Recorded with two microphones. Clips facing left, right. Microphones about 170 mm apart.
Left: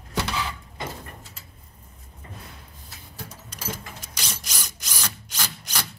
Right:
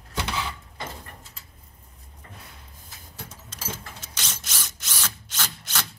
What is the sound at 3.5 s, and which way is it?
Drill, 15° left (ahead or behind).